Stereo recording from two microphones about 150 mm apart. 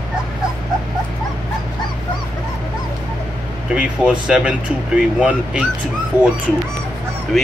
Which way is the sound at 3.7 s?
5° right (ahead or behind).